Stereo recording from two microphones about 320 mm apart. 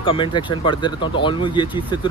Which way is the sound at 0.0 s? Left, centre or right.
Centre.